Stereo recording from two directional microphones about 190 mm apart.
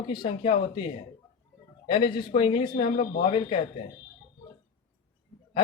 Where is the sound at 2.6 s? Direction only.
50° left (ahead or behind).